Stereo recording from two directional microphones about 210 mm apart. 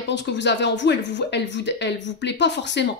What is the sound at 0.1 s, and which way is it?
A woman's voice, 55° left (ahead or behind).